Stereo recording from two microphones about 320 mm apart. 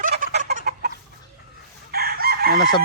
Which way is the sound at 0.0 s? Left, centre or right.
Right.